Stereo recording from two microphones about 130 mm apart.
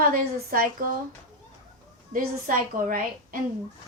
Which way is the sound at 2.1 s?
90° right.